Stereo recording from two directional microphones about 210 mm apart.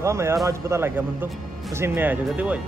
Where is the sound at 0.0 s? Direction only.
15° right (ahead or behind).